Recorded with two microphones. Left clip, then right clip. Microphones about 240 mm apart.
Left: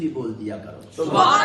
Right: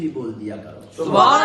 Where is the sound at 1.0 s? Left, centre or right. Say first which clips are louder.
Right 3 dB; right.